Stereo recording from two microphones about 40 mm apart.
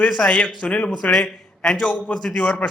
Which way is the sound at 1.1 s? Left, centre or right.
Centre.